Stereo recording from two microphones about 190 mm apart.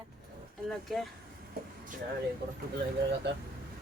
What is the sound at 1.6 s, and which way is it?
Vehicle, 50° right (ahead or behind).